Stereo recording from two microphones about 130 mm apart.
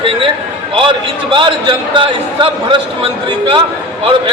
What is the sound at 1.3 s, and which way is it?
A man's voice, 40° right (ahead or behind).